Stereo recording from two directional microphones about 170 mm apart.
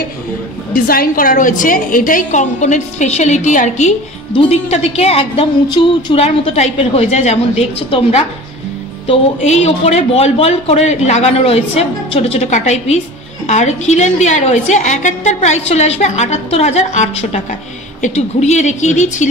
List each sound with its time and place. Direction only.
0.7 s a woman's voice: 60° left (ahead or behind)